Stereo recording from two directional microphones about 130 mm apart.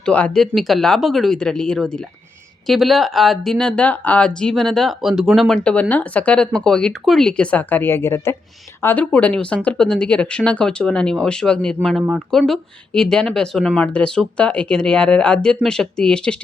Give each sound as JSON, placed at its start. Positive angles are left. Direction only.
{"t": 0.0, "sound": "speech", "side_deg": 10}